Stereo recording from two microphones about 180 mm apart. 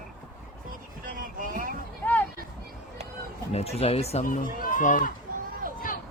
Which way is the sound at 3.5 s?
35° left (ahead or behind).